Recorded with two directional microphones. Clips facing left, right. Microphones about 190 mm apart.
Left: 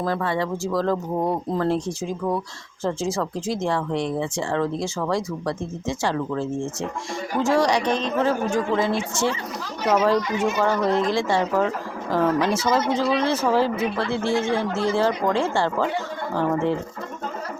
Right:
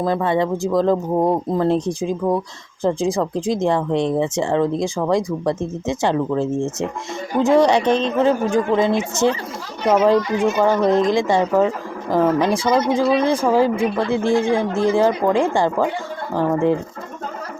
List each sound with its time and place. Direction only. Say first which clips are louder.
0.0 s a woman's voice: right 5 dB; 20° right (ahead or behind)